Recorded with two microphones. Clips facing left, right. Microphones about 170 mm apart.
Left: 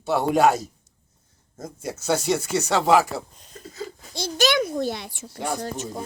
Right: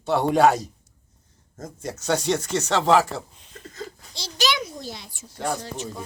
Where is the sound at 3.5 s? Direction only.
5° left (ahead or behind).